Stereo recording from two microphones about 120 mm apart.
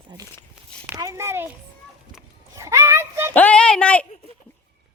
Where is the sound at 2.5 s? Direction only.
25° right (ahead or behind).